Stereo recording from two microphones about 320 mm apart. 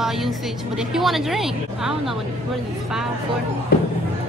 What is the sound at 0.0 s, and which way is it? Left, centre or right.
Music, centre.